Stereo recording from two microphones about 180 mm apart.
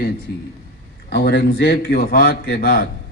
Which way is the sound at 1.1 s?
70° left (ahead or behind).